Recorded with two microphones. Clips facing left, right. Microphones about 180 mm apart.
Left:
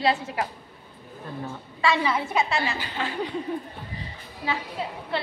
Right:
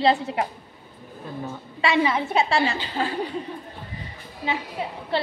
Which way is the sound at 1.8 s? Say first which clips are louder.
Right 2 dB; 20° right (ahead or behind).